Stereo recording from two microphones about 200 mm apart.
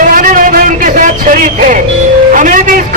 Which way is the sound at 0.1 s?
40° right (ahead or behind).